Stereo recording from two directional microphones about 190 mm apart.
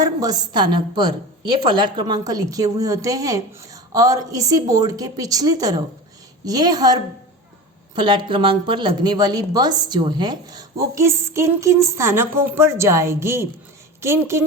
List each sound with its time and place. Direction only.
0.0 s a woman's voice: 20° right (ahead or behind)